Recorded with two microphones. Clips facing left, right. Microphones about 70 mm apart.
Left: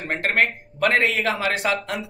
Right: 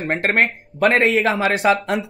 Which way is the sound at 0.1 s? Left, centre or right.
Right.